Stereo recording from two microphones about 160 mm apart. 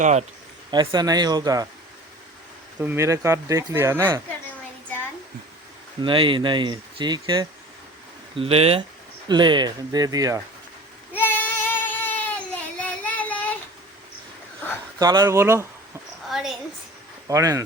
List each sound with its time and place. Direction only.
0.0 s speech: 45° right (ahead or behind)
0.7 s speech: 30° right (ahead or behind)
2.8 s speech: 15° right (ahead or behind)
6.0 s speech: 30° right (ahead or behind)
8.4 s speech: 35° right (ahead or behind); by 10.4 s 20° right (ahead or behind)
11.1 s child singing: 10° left (ahead or behind)
14.9 s speech: 25° right (ahead or behind)
16.3 s a sound: centre (ahead or behind)
17.2 s speech: 20° right (ahead or behind)